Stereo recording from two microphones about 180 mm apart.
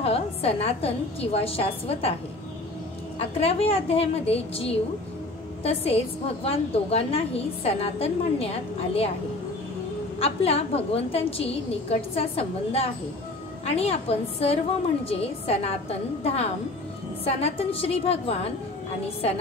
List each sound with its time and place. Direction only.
0.0 s a woman's voice: 35° left (ahead or behind)
3.2 s a woman's voice: 35° left (ahead or behind)
10.1 s a woman's voice: 35° left (ahead or behind)